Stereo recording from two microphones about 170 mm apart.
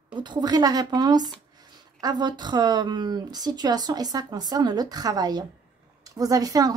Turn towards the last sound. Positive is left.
turn(degrees=-20)  # may be behind; listen again after turning